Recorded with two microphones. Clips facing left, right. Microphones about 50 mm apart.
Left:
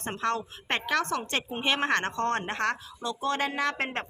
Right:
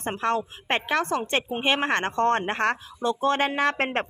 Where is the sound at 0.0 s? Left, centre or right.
Right.